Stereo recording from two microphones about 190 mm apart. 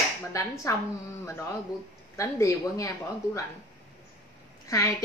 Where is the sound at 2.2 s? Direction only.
15° left (ahead or behind).